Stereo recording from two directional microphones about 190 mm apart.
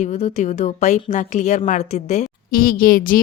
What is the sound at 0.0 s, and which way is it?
A woman's voice, 40° left (ahead or behind).